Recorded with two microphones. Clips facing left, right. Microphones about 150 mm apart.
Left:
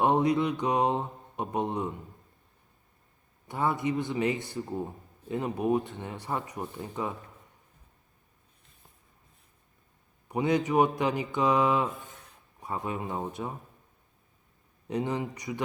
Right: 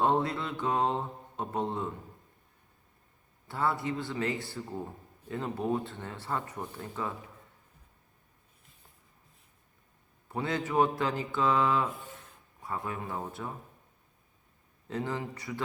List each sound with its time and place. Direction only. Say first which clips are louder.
0.0 s mantra: left 4 dB; 15° left (ahead or behind)
3.4 s speech: left 2 dB; 15° left (ahead or behind)
10.2 s speech: left 6 dB; 15° left (ahead or behind)
14.8 s speech: left 4 dB; 20° left (ahead or behind)